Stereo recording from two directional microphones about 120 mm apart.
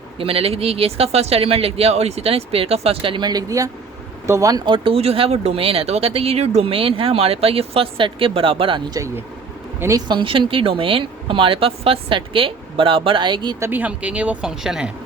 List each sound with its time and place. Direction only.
0.2 s speech: 55° right (ahead or behind); by 4.6 s 25° right (ahead or behind)
4.6 s speech: 45° right (ahead or behind)
8.9 s speech: 25° right (ahead or behind)
10.1 s speech: 45° right (ahead or behind)
13.6 s speech: 15° right (ahead or behind)